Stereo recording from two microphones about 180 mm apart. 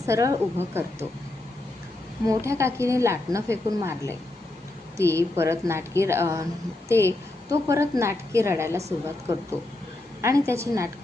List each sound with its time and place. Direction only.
0.0 s a woman's voice: 15° right (ahead or behind)
2.2 s a woman's voice: 15° right (ahead or behind)
10.2 s a woman's voice: 15° right (ahead or behind)